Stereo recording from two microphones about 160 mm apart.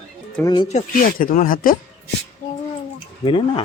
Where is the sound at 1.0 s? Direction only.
60° left (ahead or behind).